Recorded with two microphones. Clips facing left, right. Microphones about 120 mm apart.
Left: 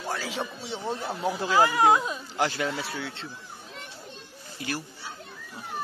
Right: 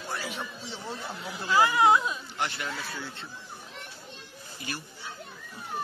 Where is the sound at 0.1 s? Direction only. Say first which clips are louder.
Left 2 dB; 90° left.